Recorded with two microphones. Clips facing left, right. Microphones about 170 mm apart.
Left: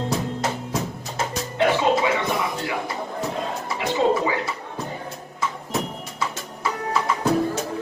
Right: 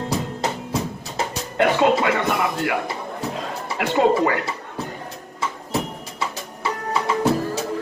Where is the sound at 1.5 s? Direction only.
60° right (ahead or behind).